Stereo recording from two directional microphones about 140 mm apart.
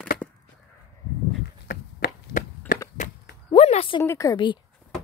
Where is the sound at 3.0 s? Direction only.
55° left (ahead or behind).